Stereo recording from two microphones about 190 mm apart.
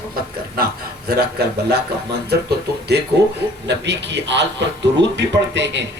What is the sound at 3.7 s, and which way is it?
A man's voice, 65° right (ahead or behind).